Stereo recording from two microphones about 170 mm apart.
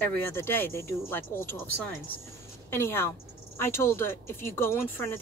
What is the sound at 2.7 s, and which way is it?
Speech, 15° left (ahead or behind).